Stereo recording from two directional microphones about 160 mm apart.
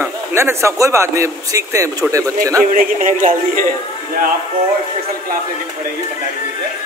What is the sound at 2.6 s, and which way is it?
Music, 55° right (ahead or behind).